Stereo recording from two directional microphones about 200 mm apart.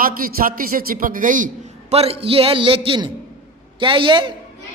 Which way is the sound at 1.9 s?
30° right (ahead or behind).